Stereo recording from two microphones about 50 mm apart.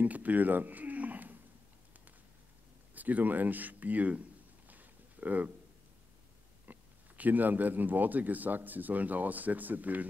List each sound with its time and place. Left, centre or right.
0.0 s speech: right
2.9 s speech: right
4.6 s a sound: right
6.7 s speech: right